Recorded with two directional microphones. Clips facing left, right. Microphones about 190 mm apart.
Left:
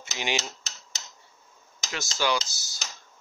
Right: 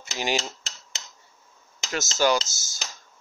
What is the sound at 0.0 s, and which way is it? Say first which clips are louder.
Cutlery: right 3 dB; 40° right (ahead or behind).